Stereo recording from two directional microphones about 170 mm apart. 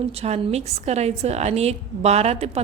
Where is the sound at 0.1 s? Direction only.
40° right (ahead or behind).